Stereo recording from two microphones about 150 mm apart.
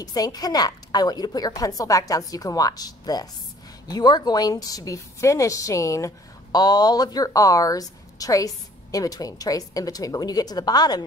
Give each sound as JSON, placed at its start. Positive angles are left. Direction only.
{"t": 0.0, "sound": "a woman's voice", "side_deg": 25}